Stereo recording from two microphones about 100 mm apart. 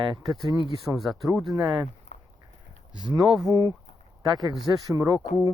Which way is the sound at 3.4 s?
35° right (ahead or behind).